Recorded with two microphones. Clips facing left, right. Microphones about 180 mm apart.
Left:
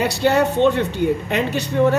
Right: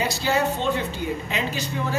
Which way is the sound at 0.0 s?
65° left (ahead or behind).